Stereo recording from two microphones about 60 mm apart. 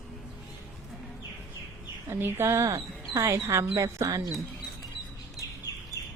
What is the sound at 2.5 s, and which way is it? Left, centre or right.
Speech, right.